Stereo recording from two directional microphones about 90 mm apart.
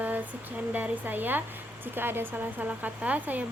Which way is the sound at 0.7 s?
20° right (ahead or behind).